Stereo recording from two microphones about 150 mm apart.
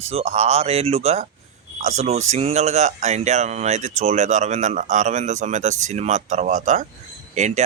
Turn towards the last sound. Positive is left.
turn(degrees=-55)  # may be behind; listen again after turning